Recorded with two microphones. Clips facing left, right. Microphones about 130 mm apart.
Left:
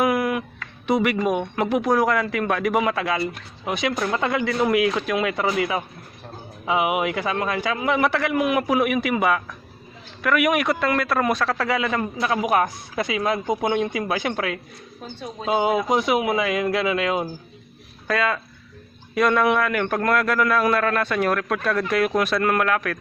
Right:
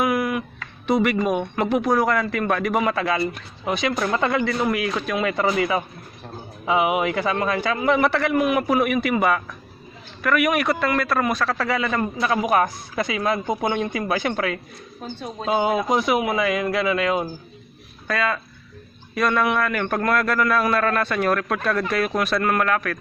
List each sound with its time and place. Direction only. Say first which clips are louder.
0.0 s a sound: left 1 dB; 30° left (ahead or behind)
0.9 s speech: right 1 dB; 10° left (ahead or behind)
10.2 s speech: even; 20° left (ahead or behind)
19.3 s speech: left 1 dB; 5° left (ahead or behind)